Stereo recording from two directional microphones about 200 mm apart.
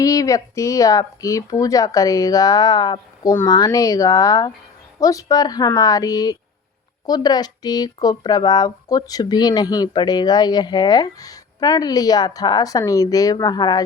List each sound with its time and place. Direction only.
0.0 s speech: 15° left (ahead or behind)